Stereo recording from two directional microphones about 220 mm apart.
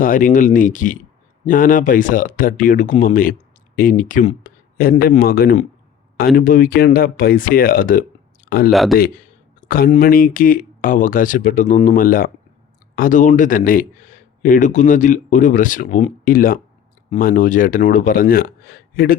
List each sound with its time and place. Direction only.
0.0 s speech: 40° left (ahead or behind)
8.7 s a man's voice: centre (ahead or behind)
9.0 s speech: 40° left (ahead or behind)